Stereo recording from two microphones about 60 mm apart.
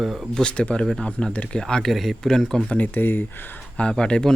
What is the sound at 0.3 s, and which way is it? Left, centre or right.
Speech, centre.